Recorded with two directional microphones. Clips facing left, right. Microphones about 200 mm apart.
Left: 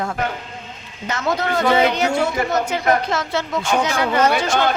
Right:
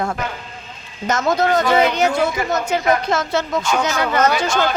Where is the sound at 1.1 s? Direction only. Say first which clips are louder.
Right 4 dB; 45° right (ahead or behind).